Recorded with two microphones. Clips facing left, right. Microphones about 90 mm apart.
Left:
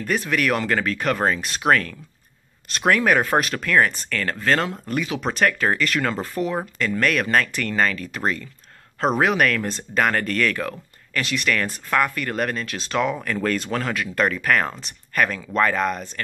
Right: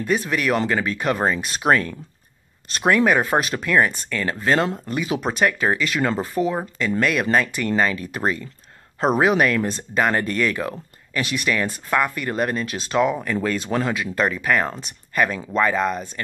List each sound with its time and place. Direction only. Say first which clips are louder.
0.0 s speech: right 1 dB; 5° right (ahead or behind)